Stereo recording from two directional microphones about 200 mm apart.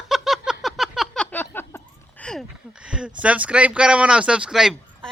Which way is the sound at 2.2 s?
Centre (ahead or behind).